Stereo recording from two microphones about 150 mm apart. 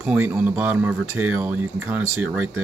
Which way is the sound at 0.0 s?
10° right (ahead or behind).